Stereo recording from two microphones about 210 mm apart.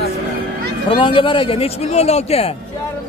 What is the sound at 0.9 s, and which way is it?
Speech, 25° left (ahead or behind).